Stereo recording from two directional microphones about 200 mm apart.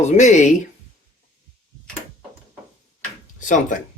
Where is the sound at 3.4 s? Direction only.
40° left (ahead or behind).